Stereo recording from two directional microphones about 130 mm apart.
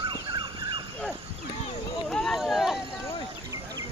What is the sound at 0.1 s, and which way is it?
Fowl, 35° right (ahead or behind).